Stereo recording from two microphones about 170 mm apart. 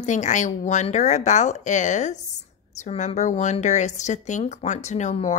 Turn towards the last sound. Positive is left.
turn(degrees=45)  # may be behind; listen again after turning